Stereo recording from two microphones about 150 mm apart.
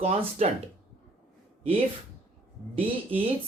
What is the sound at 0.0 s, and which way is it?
Speech, 45° right (ahead or behind).